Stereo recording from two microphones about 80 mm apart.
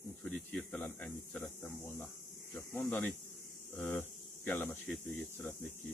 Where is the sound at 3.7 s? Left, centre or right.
Left.